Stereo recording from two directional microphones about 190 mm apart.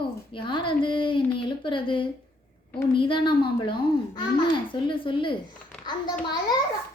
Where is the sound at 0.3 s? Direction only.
25° left (ahead or behind).